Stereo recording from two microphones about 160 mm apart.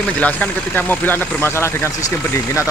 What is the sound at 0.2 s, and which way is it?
Speech, 10° left (ahead or behind).